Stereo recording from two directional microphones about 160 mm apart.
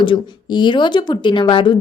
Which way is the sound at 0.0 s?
30° left (ahead or behind).